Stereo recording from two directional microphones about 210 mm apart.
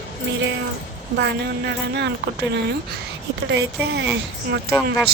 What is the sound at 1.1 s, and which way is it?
Speech, 55° right (ahead or behind).